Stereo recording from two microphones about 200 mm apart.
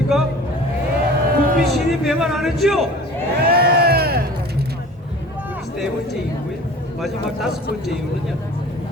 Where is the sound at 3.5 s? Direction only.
50° right (ahead or behind).